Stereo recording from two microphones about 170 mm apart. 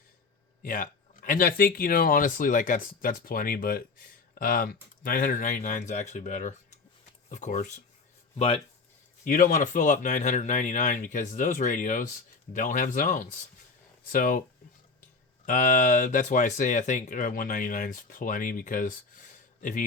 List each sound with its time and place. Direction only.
0.6 s speech: 55° left (ahead or behind); by 8.6 s 35° left (ahead or behind)
9.2 s speech: 50° left (ahead or behind)
15.4 s speech: 50° left (ahead or behind)